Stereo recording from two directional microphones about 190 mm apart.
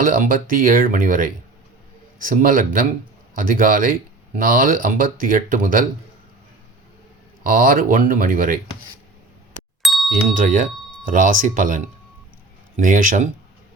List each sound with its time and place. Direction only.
0.0 s speech: 45° right (ahead or behind)
7.4 s speech: 45° right (ahead or behind)
9.8 s a sound: centre (ahead or behind)
10.3 s speech: 45° right (ahead or behind)